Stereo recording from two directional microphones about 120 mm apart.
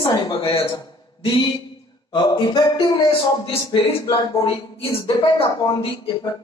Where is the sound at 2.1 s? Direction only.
40° left (ahead or behind).